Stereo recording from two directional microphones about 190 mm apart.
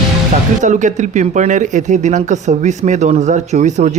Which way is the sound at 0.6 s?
40° right (ahead or behind).